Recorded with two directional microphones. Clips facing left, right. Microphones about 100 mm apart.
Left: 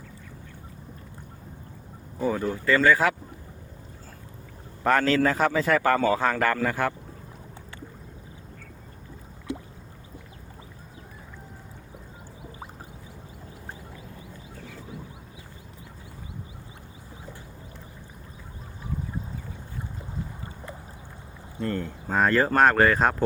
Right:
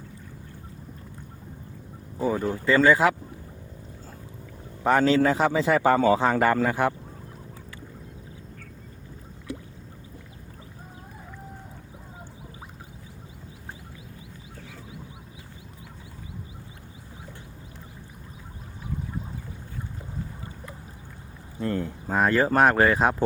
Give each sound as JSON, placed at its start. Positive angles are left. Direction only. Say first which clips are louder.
{"t": 2.2, "sound": "speech", "louder": "right 1 dB", "side_deg": -10}
{"t": 2.5, "sound": "speech", "louder": "right 3 dB", "side_deg": -30}
{"t": 2.8, "sound": "speech", "louder": "right 2 dB", "side_deg": -20}
{"t": 4.8, "sound": "a man's voice", "louder": "right 2 dB", "side_deg": -15}
{"t": 21.6, "sound": "a sound", "louder": "right 1 dB", "side_deg": -10}